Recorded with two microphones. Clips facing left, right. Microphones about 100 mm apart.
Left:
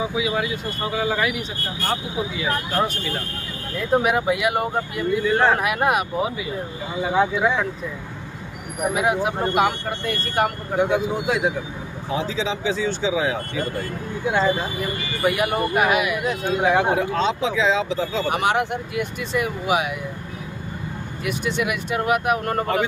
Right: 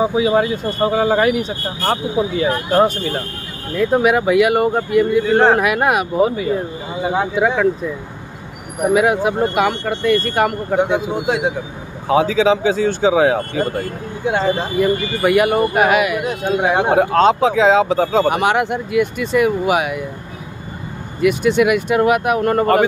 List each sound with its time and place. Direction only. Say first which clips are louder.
0.0 s speech: right 8 dB; 40° right (ahead or behind)
3.7 s speech: right 5 dB; 70° right (ahead or behind); by 6.0 s 90° right
7.3 s speech: right 4 dB; 60° right (ahead or behind)
8.9 s speech: right 7 dB; 70° right (ahead or behind); by 10.8 s 90° right
10.9 s speech: right 3 dB; 65° right (ahead or behind)
14.8 s speech: right 8 dB; 75° right (ahead or behind); by 18.4 s 60° right (ahead or behind)
18.4 s speech: right 5 dB; 85° right; by 20.0 s 65° right (ahead or behind)
21.2 s speech: right 11 dB; 70° right (ahead or behind)